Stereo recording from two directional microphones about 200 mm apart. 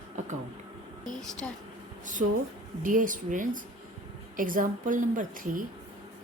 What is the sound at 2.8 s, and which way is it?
A woman's voice, 40° right (ahead or behind).